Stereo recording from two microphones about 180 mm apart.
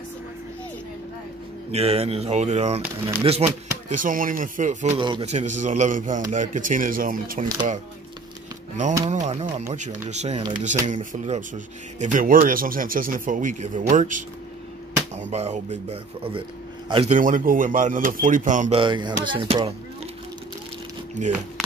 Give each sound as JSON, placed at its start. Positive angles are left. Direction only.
{"t": 1.7, "sound": "speech", "side_deg": -35}
{"t": 4.9, "sound": "speech", "side_deg": -25}
{"t": 5.3, "sound": "speech", "side_deg": -40}
{"t": 9.1, "sound": "speech", "side_deg": -40}
{"t": 18.8, "sound": "speech", "side_deg": -25}
{"t": 21.2, "sound": "speech", "side_deg": -40}